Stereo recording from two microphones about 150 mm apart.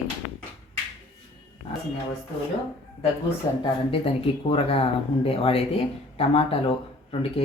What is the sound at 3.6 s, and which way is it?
Speech, 40° left (ahead or behind).